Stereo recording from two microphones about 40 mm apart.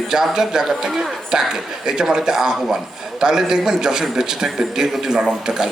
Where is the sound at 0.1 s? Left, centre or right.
Centre.